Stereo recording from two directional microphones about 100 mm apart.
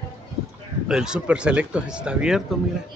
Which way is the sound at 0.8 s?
5° right (ahead or behind).